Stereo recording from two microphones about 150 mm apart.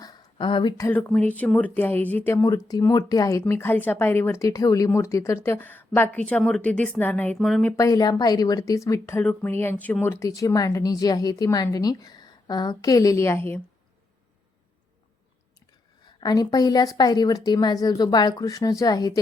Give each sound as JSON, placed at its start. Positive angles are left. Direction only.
{"t": 0.0, "sound": "a sound", "side_deg": 30}
{"t": 0.8, "sound": "a woman's voice", "side_deg": 10}
{"t": 7.8, "sound": "a woman's voice", "side_deg": 25}
{"t": 16.2, "sound": "a woman's voice", "side_deg": 25}